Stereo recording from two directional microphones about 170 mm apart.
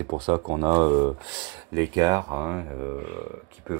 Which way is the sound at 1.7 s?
20° right (ahead or behind).